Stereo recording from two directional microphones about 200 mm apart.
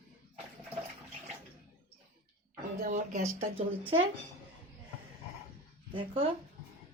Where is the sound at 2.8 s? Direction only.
40° right (ahead or behind).